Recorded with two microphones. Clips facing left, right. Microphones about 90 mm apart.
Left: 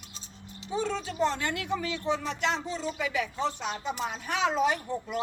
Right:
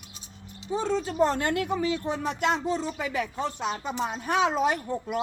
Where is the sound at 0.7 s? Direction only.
40° right (ahead or behind).